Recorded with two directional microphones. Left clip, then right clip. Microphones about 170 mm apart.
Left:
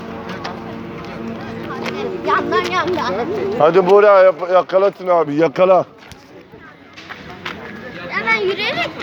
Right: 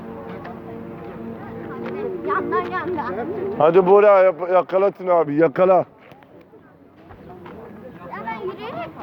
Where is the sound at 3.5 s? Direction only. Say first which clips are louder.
Left 2 dB; 60° right (ahead or behind).